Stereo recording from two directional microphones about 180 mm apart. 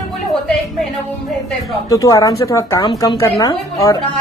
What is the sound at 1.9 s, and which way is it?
A woman's voice, 20° left (ahead or behind).